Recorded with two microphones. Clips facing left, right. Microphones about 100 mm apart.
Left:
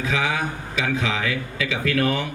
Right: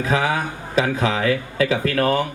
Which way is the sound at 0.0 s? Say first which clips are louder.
Right 3 dB; 40° right (ahead or behind).